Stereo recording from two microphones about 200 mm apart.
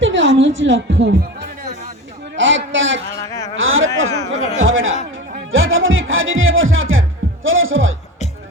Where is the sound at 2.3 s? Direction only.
70° right (ahead or behind).